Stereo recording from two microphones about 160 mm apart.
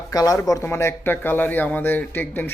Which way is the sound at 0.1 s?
25° left (ahead or behind).